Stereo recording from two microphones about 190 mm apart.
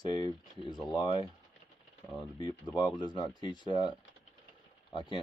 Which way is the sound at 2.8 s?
25° left (ahead or behind).